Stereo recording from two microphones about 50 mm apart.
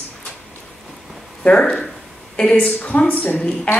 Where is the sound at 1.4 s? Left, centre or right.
Left.